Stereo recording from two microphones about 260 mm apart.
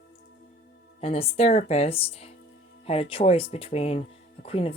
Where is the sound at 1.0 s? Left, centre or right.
Left.